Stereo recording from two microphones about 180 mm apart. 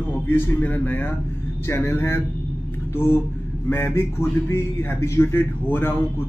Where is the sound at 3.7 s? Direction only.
15° left (ahead or behind).